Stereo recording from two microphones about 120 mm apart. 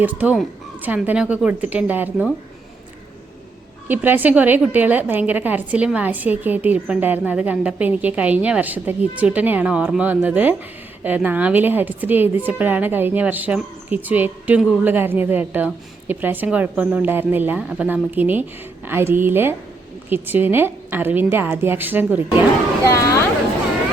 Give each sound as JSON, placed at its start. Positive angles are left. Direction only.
{"t": 0.0, "sound": "a woman's voice", "side_deg": -15}
{"t": 3.8, "sound": "a woman's voice", "side_deg": -15}
{"t": 22.9, "sound": "speech", "side_deg": 25}